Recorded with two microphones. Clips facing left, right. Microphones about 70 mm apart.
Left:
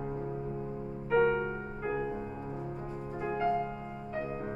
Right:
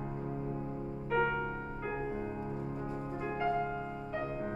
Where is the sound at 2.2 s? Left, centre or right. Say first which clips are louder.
Right 1 dB; centre.